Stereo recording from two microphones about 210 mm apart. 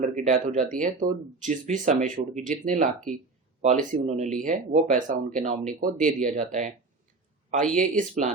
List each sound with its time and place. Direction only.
0.0 s speech: 35° right (ahead or behind)